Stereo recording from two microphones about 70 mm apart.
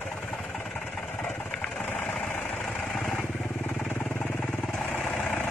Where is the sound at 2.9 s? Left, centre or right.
Centre.